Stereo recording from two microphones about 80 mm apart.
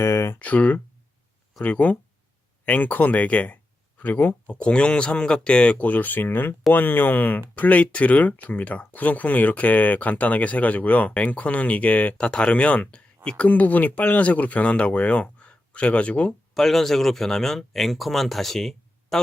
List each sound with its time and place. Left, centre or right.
0.0 s a sound: left
0.3 s speech: centre
16.6 s speech: centre